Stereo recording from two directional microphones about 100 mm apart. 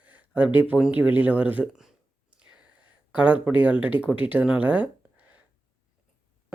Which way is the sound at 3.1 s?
15° right (ahead or behind).